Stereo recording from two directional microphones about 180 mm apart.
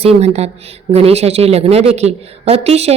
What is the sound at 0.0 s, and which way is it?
Speech, 35° right (ahead or behind).